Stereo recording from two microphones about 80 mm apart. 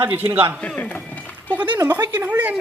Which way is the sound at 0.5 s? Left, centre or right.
Centre.